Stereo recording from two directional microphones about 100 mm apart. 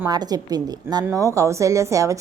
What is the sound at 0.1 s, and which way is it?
A woman's voice, 40° right (ahead or behind).